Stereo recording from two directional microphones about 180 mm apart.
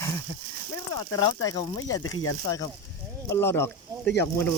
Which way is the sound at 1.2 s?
20° left (ahead or behind).